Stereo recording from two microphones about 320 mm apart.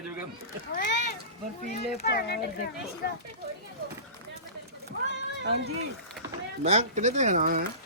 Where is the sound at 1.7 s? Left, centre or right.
Left.